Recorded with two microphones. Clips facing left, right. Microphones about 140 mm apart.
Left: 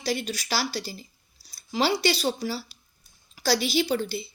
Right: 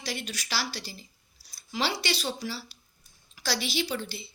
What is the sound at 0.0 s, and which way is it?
A woman's voice, 35° left (ahead or behind).